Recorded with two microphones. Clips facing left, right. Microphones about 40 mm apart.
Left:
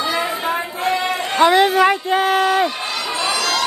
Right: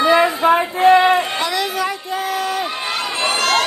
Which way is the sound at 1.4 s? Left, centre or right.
Left.